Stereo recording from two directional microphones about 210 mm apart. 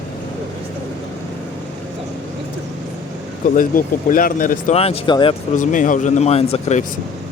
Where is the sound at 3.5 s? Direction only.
40° left (ahead or behind); by 5.3 s 25° left (ahead or behind).